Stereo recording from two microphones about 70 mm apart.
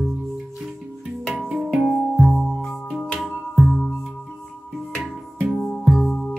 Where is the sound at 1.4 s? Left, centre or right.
Centre.